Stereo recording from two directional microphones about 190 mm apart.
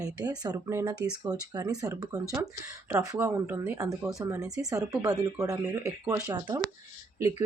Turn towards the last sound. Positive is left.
turn(degrees=-15)  # may be behind; listen again after turning